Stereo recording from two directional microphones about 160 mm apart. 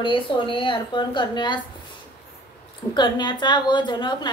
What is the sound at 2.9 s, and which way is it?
A woman's voice, 30° left (ahead or behind).